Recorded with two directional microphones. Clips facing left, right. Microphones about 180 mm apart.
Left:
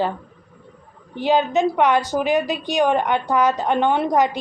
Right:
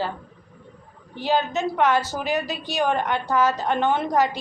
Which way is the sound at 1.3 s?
15° left (ahead or behind).